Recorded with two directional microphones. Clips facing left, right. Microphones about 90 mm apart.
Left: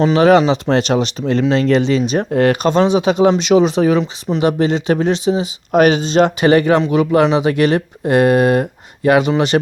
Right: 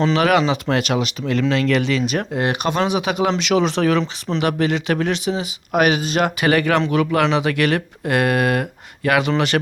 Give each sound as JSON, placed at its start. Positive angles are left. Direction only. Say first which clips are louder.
{"t": 0.0, "sound": "speech", "louder": "left 6 dB", "side_deg": 25}
{"t": 2.3, "sound": "speech", "louder": "left 11 dB", "side_deg": -15}
{"t": 2.6, "sound": "speech", "louder": "left 6 dB", "side_deg": 30}